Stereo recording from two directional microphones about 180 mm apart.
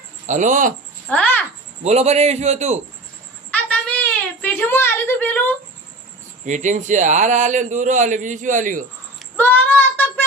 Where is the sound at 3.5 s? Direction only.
10° left (ahead or behind).